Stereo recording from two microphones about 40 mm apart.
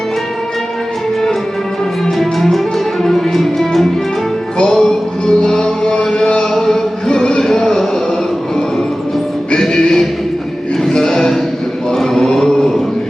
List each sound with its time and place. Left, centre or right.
2.1 s music: centre
5.8 s chant: left
6.5 s a sound: centre
9.6 s music: centre
11.9 s chant: centre